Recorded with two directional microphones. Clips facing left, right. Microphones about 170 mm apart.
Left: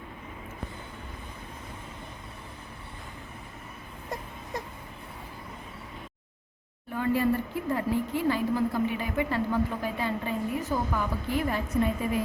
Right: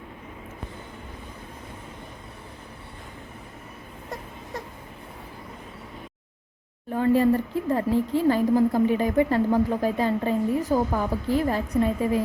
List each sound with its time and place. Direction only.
6.9 s speech: 35° right (ahead or behind)